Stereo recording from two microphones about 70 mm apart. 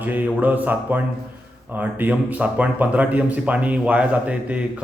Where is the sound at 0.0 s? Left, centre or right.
Right.